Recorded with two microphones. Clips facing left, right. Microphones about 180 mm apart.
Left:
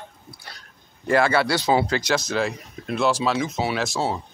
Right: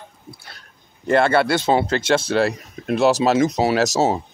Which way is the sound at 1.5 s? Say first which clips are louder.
Right 2 dB; 25° right (ahead or behind).